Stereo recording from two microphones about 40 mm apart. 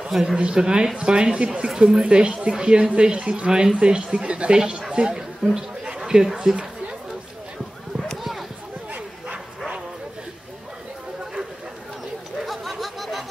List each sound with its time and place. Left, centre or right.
0.4 s speech: right
5.4 s speech: centre
5.9 s a sound: centre
8.2 s basketball bounce: centre
12.4 s chatter: centre